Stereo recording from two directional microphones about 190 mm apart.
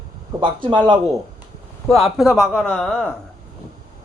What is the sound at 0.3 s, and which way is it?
Speech, 25° right (ahead or behind).